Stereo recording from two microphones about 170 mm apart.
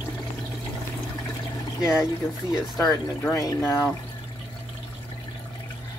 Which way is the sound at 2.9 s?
20° left (ahead or behind).